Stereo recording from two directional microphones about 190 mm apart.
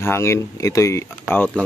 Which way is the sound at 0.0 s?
15° left (ahead or behind).